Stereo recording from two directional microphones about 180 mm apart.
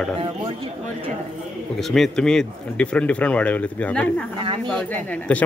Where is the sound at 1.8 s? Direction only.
Centre (ahead or behind).